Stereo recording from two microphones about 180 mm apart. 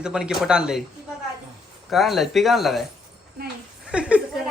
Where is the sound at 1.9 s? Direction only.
Centre (ahead or behind).